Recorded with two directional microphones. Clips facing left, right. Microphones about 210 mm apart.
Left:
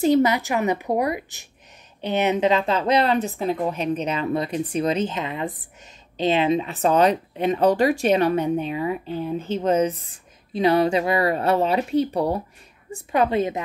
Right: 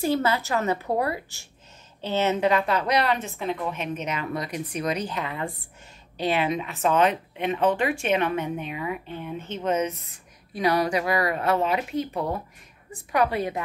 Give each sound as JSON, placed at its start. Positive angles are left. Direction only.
{"t": 0.0, "sound": "a woman's voice", "side_deg": 15}
{"t": 13.1, "sound": "a woman's voice", "side_deg": 25}